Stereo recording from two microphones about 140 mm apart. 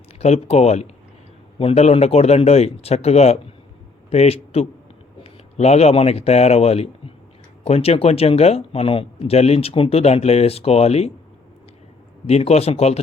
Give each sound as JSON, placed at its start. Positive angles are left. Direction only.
{"t": 0.2, "sound": "speech", "side_deg": 50}
{"t": 12.2, "sound": "speech", "side_deg": 50}